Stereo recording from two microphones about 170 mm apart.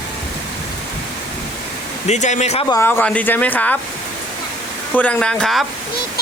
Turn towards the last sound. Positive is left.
turn(degrees=5)  # may be behind; listen again after turning